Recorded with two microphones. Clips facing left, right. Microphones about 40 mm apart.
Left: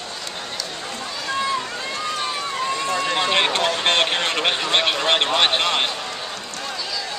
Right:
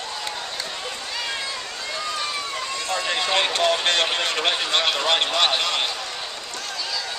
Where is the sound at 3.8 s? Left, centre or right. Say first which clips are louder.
Left 2 dB; left.